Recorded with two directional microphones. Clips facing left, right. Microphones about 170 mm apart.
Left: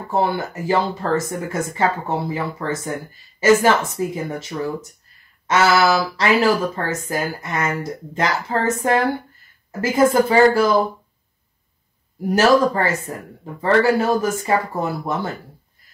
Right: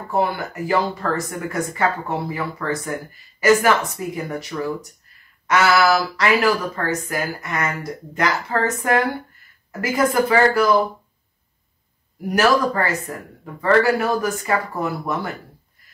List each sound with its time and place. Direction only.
0.1 s speech: 30° left (ahead or behind)
12.3 s speech: 25° left (ahead or behind)